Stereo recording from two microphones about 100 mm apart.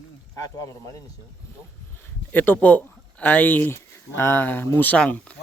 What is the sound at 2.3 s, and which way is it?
A man's voice, 15° left (ahead or behind).